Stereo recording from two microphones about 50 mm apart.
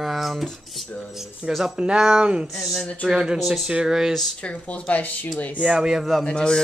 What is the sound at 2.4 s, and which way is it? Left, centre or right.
Speech, centre.